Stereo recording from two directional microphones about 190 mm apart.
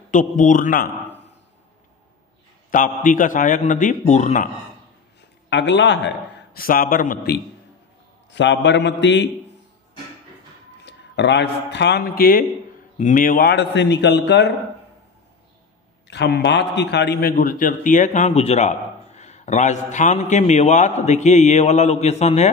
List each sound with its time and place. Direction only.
0.1 s a man's voice: 40° left (ahead or behind)
2.7 s a man's voice: 45° left (ahead or behind)
5.5 s a man's voice: 70° left (ahead or behind); by 7.4 s 55° left (ahead or behind)
8.3 s a man's voice: 70° left (ahead or behind)
10.8 s a man's voice: 65° left (ahead or behind)
16.1 s a man's voice: 60° left (ahead or behind); by 22.5 s 35° left (ahead or behind)